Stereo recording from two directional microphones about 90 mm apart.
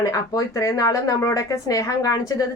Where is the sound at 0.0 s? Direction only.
40° left (ahead or behind).